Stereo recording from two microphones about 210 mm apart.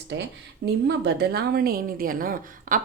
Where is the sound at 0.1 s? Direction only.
55° right (ahead or behind).